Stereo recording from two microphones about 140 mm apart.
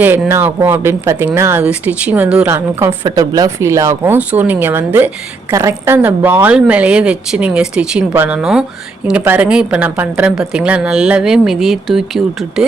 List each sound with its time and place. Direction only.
0.0 s a woman's voice: 15° right (ahead or behind)